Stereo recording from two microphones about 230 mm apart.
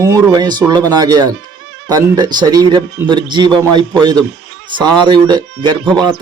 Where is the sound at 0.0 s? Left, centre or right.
Centre.